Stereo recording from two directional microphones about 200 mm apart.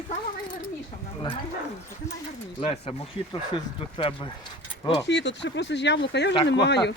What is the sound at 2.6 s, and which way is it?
Speech, 30° left (ahead or behind).